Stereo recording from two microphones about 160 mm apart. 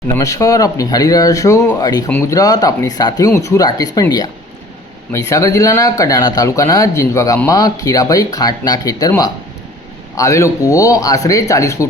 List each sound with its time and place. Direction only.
0.2 s speech: 20° left (ahead or behind)